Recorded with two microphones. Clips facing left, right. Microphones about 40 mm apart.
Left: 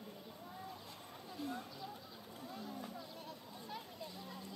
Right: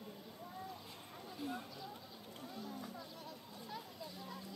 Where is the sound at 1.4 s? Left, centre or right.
Centre.